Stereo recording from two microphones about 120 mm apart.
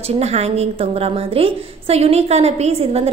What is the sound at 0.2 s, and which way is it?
A woman's voice, 65° right (ahead or behind).